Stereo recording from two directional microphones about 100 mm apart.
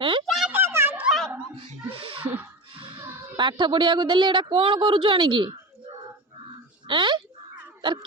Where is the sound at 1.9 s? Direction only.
65° right (ahead or behind).